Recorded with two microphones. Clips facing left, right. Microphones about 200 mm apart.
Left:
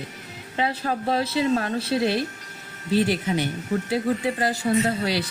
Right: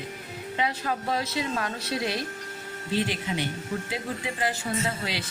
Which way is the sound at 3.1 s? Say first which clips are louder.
Left 6 dB; 45° left (ahead or behind).